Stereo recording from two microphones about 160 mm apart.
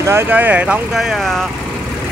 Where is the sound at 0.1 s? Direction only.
10° right (ahead or behind).